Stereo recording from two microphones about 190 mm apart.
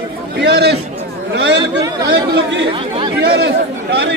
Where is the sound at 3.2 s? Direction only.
60° right (ahead or behind).